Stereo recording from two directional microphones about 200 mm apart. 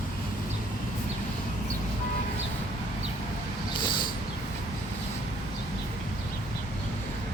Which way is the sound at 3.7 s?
25° left (ahead or behind).